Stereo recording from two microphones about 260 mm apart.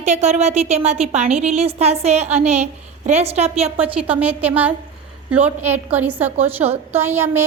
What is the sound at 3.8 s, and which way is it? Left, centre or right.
A woman's voice, centre.